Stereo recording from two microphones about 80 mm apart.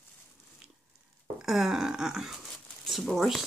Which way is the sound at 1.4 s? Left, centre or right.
Centre.